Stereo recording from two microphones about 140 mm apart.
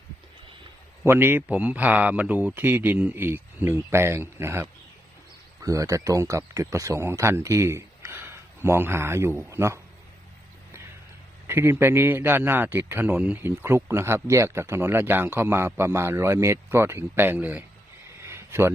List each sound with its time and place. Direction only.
1.0 s a man's voice: 15° right (ahead or behind)
11.4 s a man's voice: 20° right (ahead or behind)
18.2 s a sound: 20° right (ahead or behind)